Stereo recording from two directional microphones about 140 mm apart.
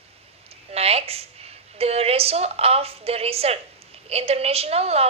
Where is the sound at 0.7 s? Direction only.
45° right (ahead or behind).